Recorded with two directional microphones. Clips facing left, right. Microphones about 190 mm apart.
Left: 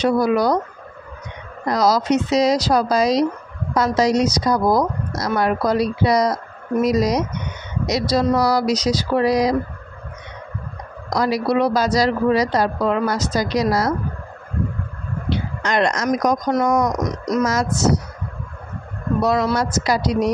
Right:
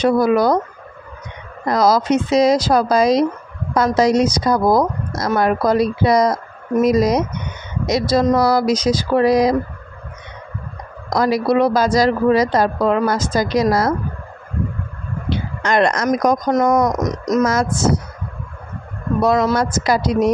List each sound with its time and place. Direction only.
0.0 s a woman's voice: 50° right (ahead or behind)
1.7 s a woman's voice: 50° right (ahead or behind)
11.1 s a woman's voice: 50° right (ahead or behind)
15.2 s a woman's voice: 50° right (ahead or behind)
19.2 s a woman's voice: 50° right (ahead or behind)